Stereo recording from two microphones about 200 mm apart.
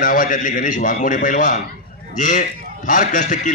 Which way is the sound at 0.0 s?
40° left (ahead or behind).